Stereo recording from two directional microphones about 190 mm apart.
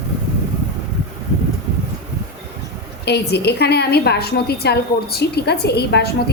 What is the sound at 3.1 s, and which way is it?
A woman's voice, 60° left (ahead or behind).